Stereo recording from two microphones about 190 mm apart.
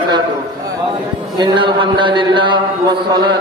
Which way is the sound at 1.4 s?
25° right (ahead or behind).